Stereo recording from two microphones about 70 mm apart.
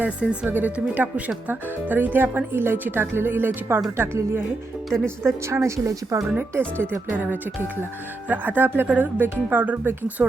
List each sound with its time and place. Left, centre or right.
0.0 s a woman's voice: centre; by 6.2 s right
6.2 s speech: right